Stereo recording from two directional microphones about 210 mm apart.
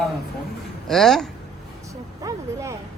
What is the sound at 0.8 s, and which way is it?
Speech, centre (ahead or behind).